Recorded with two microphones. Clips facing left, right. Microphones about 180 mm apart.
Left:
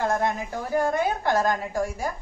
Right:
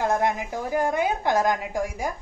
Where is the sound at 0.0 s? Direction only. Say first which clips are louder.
Right 1 dB; 15° right (ahead or behind).